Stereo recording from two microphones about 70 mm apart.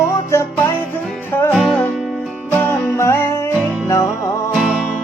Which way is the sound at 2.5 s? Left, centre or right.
Left.